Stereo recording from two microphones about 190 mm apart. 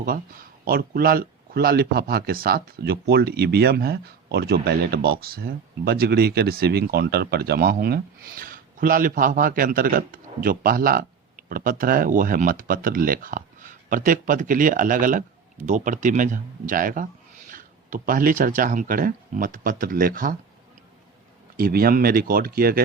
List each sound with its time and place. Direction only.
0.6 s speech: 55° right (ahead or behind)
21.5 s speech: 50° right (ahead or behind)